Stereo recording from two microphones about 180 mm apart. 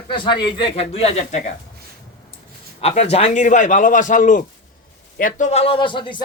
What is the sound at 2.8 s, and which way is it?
A man's voice, 35° left (ahead or behind).